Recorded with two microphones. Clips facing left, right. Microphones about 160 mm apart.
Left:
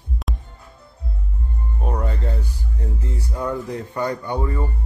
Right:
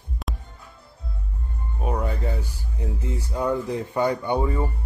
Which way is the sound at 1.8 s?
5° right (ahead or behind).